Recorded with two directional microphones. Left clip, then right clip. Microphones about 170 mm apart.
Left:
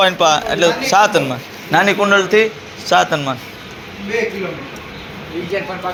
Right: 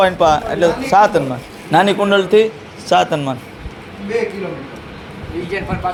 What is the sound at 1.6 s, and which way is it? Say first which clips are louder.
A man's voice: even; 30° right (ahead or behind).